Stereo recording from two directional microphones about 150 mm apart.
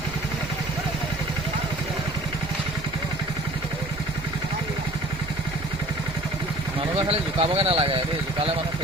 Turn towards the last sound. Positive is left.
turn(degrees=-40)  # may be behind; listen again after turning